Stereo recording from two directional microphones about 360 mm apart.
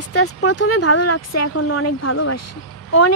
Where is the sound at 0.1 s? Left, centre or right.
Left.